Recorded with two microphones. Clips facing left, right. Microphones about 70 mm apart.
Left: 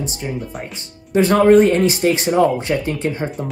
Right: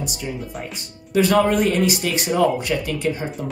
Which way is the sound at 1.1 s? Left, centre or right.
Left.